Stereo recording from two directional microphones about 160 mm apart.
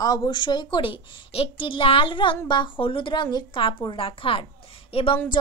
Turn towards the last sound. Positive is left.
turn(degrees=35)  # may be behind; listen again after turning